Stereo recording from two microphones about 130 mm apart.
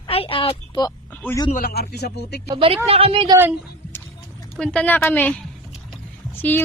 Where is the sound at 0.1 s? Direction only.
45° left (ahead or behind).